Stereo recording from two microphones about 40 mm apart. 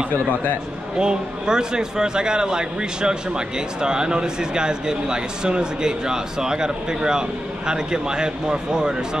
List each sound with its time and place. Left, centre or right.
0.9 s a man's voice: right